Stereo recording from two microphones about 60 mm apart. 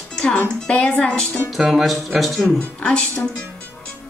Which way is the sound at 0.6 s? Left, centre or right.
Centre.